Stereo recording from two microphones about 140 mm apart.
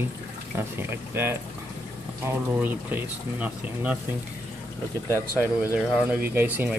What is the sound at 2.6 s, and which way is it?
Speech, 10° right (ahead or behind).